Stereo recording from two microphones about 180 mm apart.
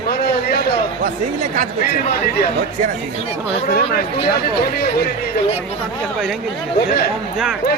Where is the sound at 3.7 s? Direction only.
60° left (ahead or behind).